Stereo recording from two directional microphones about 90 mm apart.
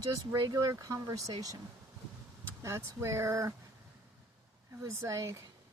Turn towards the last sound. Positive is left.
turn(degrees=-35)  # may be behind; listen again after turning